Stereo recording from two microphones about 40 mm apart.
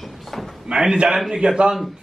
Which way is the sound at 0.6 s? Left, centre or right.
Centre.